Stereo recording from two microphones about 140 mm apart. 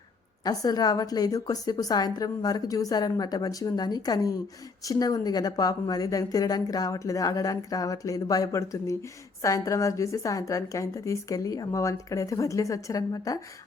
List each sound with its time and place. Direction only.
0.4 s a woman's voice: 30° left (ahead or behind)